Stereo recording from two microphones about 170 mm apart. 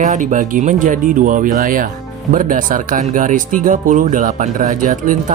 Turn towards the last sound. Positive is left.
turn(degrees=-50)  # may be behind; listen again after turning